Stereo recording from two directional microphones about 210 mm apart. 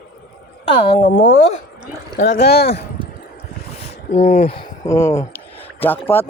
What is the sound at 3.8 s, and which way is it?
Speech, 30° left (ahead or behind).